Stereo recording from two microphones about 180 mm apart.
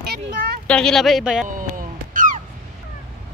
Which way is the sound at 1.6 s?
50° right (ahead or behind).